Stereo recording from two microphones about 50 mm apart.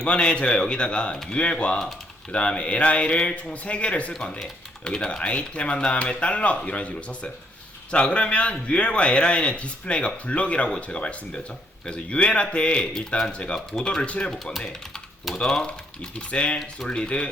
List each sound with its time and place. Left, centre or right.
0.0 s a man's voice: left
4.1 s speech: centre
4.8 s a man's voice: left